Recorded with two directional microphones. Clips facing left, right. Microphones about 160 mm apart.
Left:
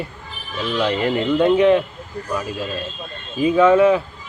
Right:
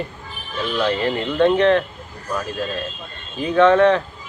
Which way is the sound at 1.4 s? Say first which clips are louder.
Even; 10° left (ahead or behind).